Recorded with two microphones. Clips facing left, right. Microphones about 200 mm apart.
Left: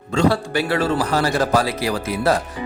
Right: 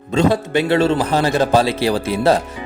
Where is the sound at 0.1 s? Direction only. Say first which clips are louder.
Right 2 dB; 20° right (ahead or behind).